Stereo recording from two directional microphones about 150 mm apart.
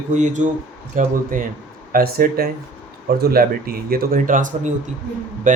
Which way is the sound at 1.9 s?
80° right.